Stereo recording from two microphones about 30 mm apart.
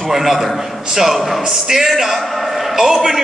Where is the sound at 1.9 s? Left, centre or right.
Centre.